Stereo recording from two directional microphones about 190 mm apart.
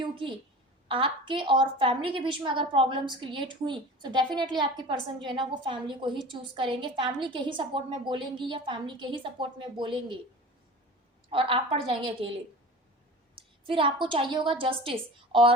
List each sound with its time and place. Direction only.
0.0 s a sound: 25° right (ahead or behind)
0.9 s a woman's voice: 25° right (ahead or behind)
11.3 s a woman's voice: 30° right (ahead or behind)
13.7 s a woman's voice: 25° right (ahead or behind)